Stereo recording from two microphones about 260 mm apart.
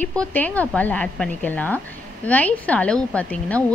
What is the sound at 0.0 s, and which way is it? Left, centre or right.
A woman's voice, centre.